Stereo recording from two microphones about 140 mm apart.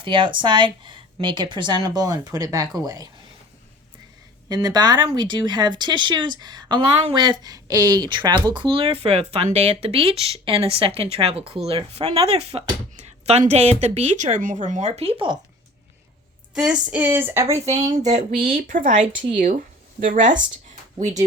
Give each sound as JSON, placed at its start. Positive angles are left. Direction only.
{"t": 0.0, "sound": "speech", "side_deg": -35}
{"t": 4.4, "sound": "a woman's voice", "side_deg": -25}
{"t": 16.6, "sound": "a sound", "side_deg": -10}
{"t": 17.5, "sound": "a woman's voice", "side_deg": -50}
{"t": 18.4, "sound": "speech", "side_deg": -80}
{"t": 20.1, "sound": "speech", "side_deg": -65}